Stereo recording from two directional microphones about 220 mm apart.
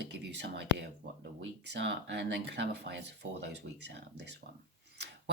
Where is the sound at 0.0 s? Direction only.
50° right (ahead or behind).